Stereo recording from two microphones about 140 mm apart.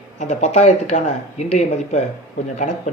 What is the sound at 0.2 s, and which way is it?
Speech, 55° left (ahead or behind).